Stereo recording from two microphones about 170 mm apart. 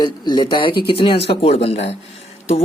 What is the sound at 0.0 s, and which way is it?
Speech, 25° left (ahead or behind).